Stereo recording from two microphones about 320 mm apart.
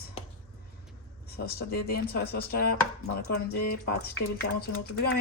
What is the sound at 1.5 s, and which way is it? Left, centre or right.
Speech, left.